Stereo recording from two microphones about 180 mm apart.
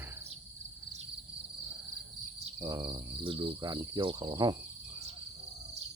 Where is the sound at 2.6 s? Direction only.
20° right (ahead or behind).